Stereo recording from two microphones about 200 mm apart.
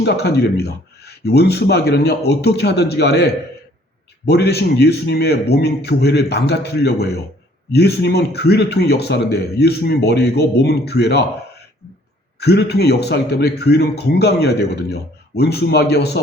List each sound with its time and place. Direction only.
0.0 s a man's voice: 55° left (ahead or behind)
12.4 s a man's voice: 55° left (ahead or behind)